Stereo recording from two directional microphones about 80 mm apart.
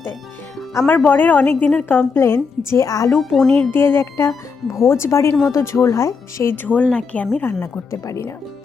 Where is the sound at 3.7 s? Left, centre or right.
Left.